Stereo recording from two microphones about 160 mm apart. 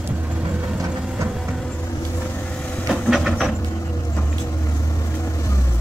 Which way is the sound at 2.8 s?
Centre (ahead or behind).